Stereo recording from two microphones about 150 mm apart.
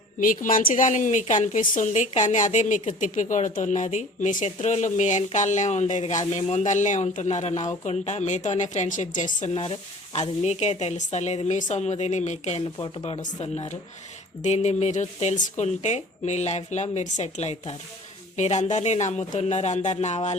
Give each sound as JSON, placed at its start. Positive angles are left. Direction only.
{"t": 0.2, "sound": "a woman's voice", "side_deg": 65}
{"t": 9.6, "sound": "speech", "side_deg": 40}
{"t": 12.8, "sound": "speech", "side_deg": 35}
{"t": 13.2, "sound": "speech", "side_deg": 45}